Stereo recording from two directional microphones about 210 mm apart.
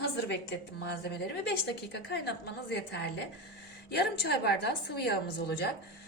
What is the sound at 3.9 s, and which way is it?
A woman's voice, 55° left (ahead or behind).